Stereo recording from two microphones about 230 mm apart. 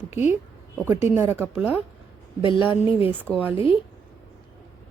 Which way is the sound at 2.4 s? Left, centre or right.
Left.